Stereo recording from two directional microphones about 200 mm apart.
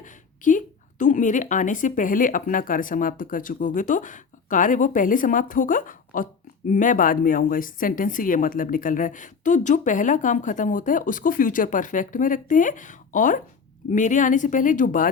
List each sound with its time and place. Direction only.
0.0 s a woman's voice: 40° left (ahead or behind)